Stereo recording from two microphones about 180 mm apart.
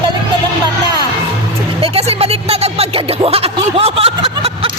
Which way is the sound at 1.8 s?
35° right (ahead or behind).